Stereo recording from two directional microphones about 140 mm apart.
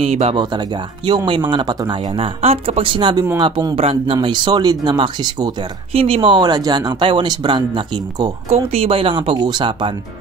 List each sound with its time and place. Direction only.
0.0 s speech: 50° right (ahead or behind)
0.4 s speech: 30° right (ahead or behind)
5.9 s speech: 45° right (ahead or behind)